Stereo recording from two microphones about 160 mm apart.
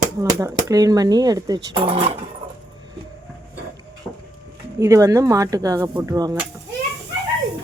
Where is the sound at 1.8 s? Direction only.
35° right (ahead or behind).